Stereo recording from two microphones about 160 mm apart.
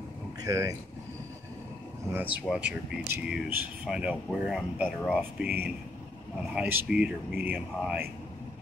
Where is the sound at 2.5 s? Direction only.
10° right (ahead or behind).